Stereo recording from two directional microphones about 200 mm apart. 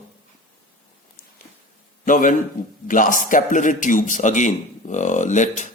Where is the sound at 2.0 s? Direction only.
40° left (ahead or behind).